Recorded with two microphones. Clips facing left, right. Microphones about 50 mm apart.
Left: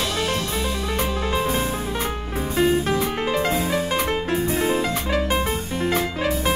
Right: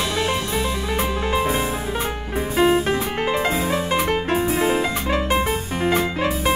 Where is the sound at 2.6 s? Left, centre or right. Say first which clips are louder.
Right 2 dB; right.